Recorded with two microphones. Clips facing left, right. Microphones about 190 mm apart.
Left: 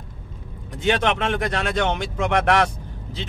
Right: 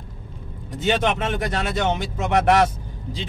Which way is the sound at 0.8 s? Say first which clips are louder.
Left 1 dB; 5° right (ahead or behind).